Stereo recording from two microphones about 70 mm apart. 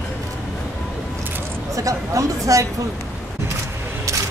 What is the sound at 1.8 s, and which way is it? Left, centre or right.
Speech, right.